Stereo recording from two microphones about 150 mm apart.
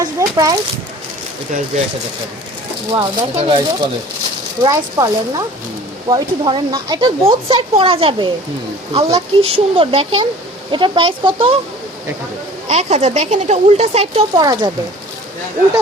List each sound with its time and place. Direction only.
0.0 s a sound: 20° right (ahead or behind)
1.7 s speech: 45° right (ahead or behind)
2.9 s speech: 30° right (ahead or behind)
3.3 s speech: 40° right (ahead or behind)
4.6 s speech: 25° right (ahead or behind)
12.6 s speech: 50° right (ahead or behind)
14.4 s speech: 30° right (ahead or behind)